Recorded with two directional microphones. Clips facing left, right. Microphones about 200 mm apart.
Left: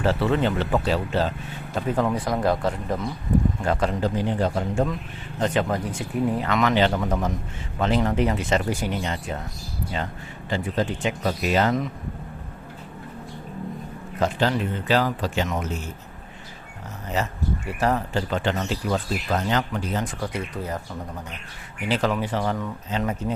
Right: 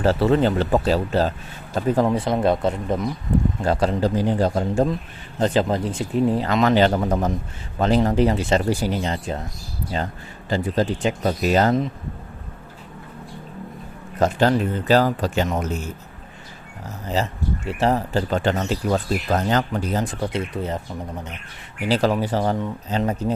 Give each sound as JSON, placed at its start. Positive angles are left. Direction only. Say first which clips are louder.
{"t": 0.0, "sound": "speech", "louder": "right 4 dB", "side_deg": -40}
{"t": 2.0, "sound": "speech", "louder": "right 3 dB", "side_deg": -25}
{"t": 3.6, "sound": "speech", "louder": "right 3 dB", "side_deg": -35}
{"t": 10.5, "sound": "speech", "louder": "right 4 dB", "side_deg": -35}
{"t": 14.2, "sound": "speech", "louder": "right 4 dB", "side_deg": -45}
{"t": 17.2, "sound": "speech", "louder": "right 2 dB", "side_deg": -30}
{"t": 21.8, "sound": "speech", "louder": "right 4 dB", "side_deg": -35}